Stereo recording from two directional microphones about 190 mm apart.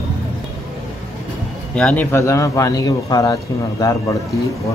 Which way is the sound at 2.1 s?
15° left (ahead or behind).